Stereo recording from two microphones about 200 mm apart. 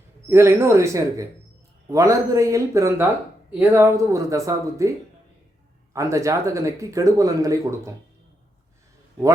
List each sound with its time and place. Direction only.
0.3 s speech: 10° right (ahead or behind)